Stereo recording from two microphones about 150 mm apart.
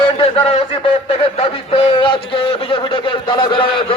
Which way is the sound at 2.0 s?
35° left (ahead or behind).